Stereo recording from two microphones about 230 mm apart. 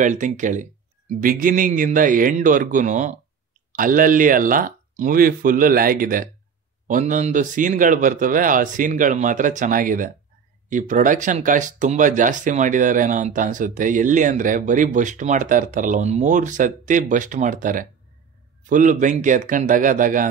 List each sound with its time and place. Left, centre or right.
0.0 s speech: right